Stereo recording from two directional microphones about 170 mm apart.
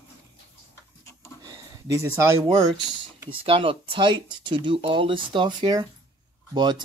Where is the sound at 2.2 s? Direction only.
15° right (ahead or behind).